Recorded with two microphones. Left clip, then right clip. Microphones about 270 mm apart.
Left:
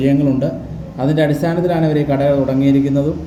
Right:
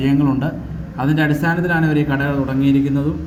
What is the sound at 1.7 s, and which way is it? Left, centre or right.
Speech, right.